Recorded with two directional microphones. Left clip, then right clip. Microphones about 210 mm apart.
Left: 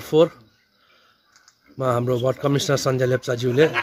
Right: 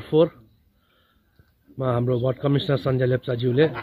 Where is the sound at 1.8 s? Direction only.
15° left (ahead or behind).